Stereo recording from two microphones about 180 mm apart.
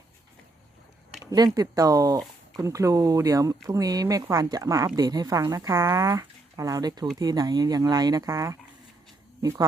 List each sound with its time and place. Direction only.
1.5 s speech: 20° right (ahead or behind)